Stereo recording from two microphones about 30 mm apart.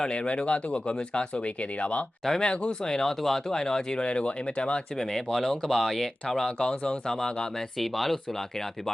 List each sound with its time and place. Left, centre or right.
0.0 s speech: left
1.3 s speech: left
2.4 s speech: left
4.0 s speech: left
4.9 s speech: centre
6.7 s speech: left
7.1 s speech: left
7.8 s speech: centre